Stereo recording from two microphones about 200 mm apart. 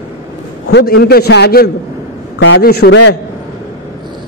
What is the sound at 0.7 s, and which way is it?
A man's voice, 50° left (ahead or behind).